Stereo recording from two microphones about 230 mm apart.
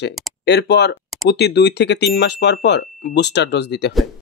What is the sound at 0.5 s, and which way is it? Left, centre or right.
Speech, left.